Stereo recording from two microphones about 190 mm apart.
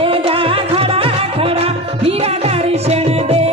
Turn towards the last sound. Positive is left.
turn(degrees=-35)  # may be behind; listen again after turning